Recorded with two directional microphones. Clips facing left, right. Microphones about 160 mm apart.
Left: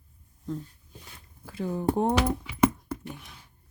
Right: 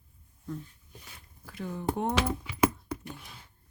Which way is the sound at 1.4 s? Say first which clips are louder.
Left 5 dB; 30° left (ahead or behind).